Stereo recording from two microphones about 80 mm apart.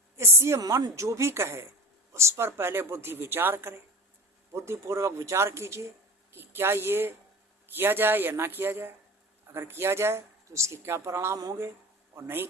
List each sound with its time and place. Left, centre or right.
0.2 s speech: right
0.6 s a man's voice: right